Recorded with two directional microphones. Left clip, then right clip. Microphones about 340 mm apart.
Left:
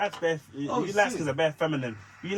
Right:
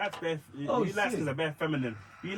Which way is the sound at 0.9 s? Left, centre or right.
Centre.